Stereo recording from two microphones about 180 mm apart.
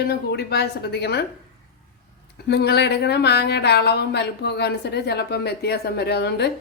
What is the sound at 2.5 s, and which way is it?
Speech, 65° left (ahead or behind).